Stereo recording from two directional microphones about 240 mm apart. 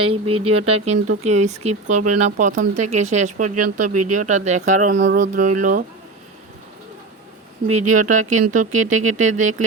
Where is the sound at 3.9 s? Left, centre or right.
Right.